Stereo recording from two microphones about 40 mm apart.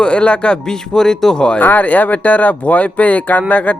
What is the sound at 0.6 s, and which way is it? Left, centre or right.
Speech, centre.